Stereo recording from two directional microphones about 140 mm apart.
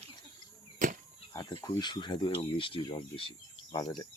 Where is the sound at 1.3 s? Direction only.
25° left (ahead or behind).